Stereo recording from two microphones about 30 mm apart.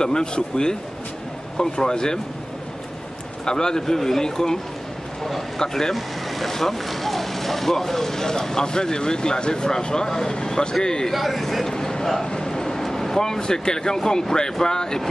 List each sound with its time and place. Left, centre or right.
0.0 s speech: left
3.4 s speech: left
5.6 s speech: centre
5.9 s speech: centre; by 11.1 s left
11.1 s speech: centre
11.7 s speech: centre